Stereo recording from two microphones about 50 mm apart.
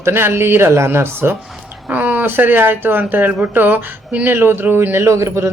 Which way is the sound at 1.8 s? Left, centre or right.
Right.